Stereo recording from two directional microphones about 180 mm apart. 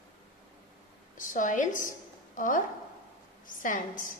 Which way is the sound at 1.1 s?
45° left (ahead or behind).